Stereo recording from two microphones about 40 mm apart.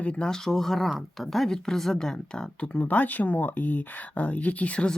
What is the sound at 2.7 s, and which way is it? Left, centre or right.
Speech, left.